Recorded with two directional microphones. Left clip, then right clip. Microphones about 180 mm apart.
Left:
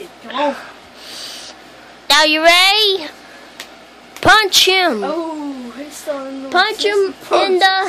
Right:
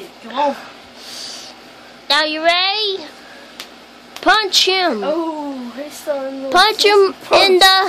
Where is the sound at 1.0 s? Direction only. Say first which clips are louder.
Even; centre (ahead or behind).